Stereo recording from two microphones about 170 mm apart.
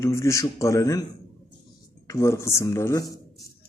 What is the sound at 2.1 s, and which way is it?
Speech, 15° left (ahead or behind).